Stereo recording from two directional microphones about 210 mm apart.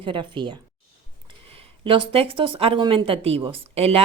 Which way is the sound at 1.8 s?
25° right (ahead or behind).